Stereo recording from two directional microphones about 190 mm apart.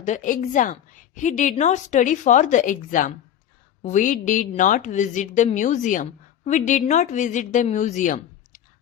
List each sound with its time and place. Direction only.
0.0 s a woman's voice: 40° left (ahead or behind)